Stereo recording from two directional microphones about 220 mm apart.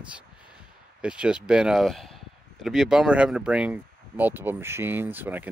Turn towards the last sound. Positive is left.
turn(degrees=-10)  # may be behind; listen again after turning